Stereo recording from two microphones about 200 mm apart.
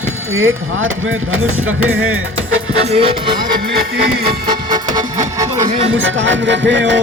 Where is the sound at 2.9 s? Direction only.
30° right (ahead or behind).